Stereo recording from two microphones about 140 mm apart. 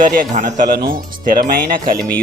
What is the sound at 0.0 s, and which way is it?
Speech, 70° right (ahead or behind).